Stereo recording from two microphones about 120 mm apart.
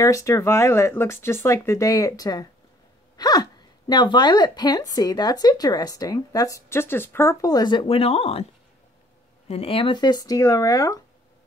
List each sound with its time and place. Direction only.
0.0 s speech: 25° left (ahead or behind)
7.4 s speech: 35° left (ahead or behind)
7.9 s speech: 55° left (ahead or behind)
9.5 s speech: 55° left (ahead or behind); by 11.0 s 30° left (ahead or behind)